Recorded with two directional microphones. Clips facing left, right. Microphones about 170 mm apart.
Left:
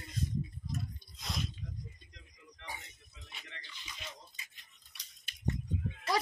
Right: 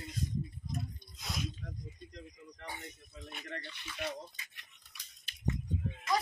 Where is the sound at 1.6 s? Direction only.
45° right (ahead or behind); by 4.2 s 70° right (ahead or behind).